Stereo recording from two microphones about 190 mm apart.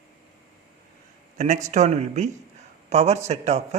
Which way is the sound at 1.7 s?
35° right (ahead or behind).